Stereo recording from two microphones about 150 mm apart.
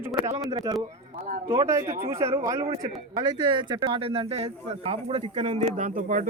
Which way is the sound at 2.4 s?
25° right (ahead or behind).